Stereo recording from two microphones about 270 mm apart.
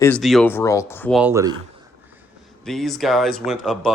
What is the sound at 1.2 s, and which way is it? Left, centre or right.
Speech, centre.